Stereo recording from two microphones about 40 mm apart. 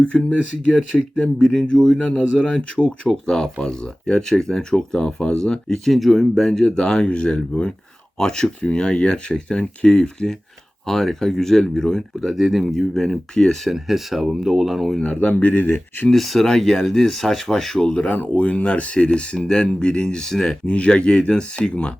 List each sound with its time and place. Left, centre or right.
0.1 s speech: centre
0.9 s speech: left
5.8 s speech: centre; by 7.7 s left
8.2 s speech: centre
12.3 s speech: centre
12.8 s speech: centre
13.7 s speech: centre
15.0 s speech: left
16.1 s speech: centre
17.7 s speech: centre
18.3 s speech: left; by 19.6 s centre
19.6 s speech: left
20.7 s speech: left